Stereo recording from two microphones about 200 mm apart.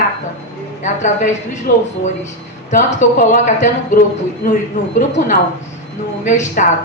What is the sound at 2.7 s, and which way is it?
A woman's voice, 35° left (ahead or behind).